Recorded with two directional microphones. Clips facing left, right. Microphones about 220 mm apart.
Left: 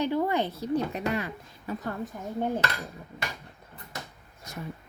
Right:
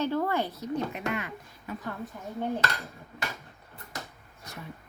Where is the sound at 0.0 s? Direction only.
15° left (ahead or behind); by 1.9 s 35° left (ahead or behind).